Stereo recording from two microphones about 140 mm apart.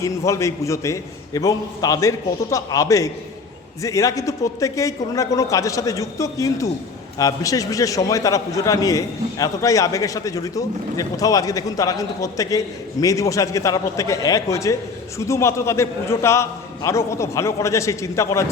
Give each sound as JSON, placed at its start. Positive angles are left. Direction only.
{"t": 0.0, "sound": "a man's voice", "side_deg": 20}